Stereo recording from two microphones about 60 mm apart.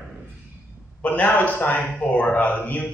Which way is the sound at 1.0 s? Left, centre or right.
Left.